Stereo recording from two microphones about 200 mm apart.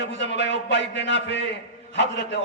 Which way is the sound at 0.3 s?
60° left (ahead or behind).